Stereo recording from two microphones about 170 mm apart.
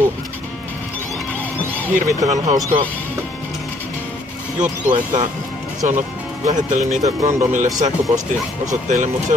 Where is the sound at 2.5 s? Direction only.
20° right (ahead or behind).